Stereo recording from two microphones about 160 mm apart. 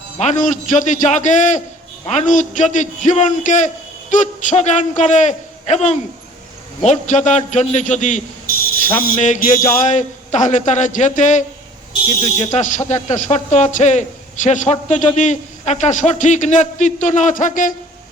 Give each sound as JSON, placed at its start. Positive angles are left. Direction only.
{"t": 0.2, "sound": "a man's voice", "side_deg": 50}
{"t": 12.5, "sound": "a man's voice", "side_deg": 50}